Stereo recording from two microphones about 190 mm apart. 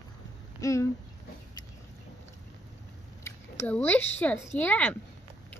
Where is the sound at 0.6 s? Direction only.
15° left (ahead or behind).